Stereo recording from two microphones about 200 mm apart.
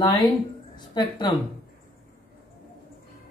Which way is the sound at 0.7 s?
20° left (ahead or behind).